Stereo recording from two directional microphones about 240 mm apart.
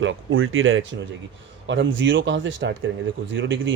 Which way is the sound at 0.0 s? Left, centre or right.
Right.